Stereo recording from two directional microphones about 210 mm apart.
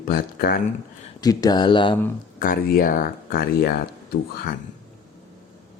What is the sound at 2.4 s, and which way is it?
Speech, 40° left (ahead or behind).